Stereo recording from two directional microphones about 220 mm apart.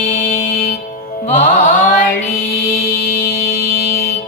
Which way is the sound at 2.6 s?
40° left (ahead or behind).